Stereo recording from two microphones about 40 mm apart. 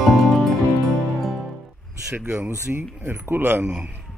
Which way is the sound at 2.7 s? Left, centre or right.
Right.